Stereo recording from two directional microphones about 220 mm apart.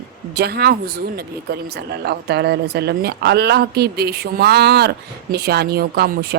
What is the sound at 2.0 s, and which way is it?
A woman's voice, 50° right (ahead or behind).